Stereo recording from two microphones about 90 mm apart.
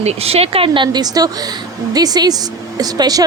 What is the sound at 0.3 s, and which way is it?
Speech, 90° right.